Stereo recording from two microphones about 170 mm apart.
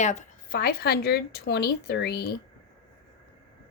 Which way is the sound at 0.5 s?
60° left (ahead or behind).